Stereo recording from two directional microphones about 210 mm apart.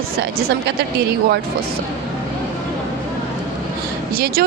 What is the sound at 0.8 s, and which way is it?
Speech, 50° right (ahead or behind).